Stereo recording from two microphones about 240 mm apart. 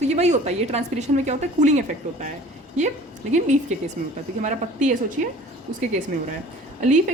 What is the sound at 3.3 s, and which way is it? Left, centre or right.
A woman's voice, right.